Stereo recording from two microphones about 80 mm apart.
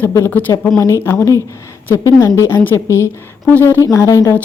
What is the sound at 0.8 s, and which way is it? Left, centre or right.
Speech, left.